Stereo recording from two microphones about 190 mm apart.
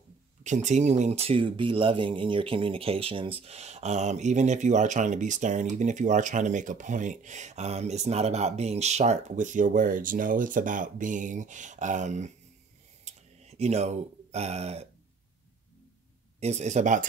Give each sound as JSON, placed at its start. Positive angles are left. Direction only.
{"t": 0.4, "sound": "speech", "side_deg": -40}
{"t": 13.0, "sound": "a sound", "side_deg": -35}
{"t": 16.3, "sound": "speech", "side_deg": -35}